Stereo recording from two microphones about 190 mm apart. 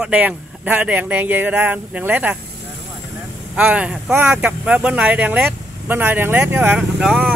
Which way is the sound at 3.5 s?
5° right (ahead or behind).